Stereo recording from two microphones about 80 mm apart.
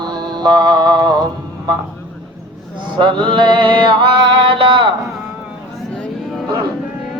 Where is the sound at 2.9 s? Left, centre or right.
Right.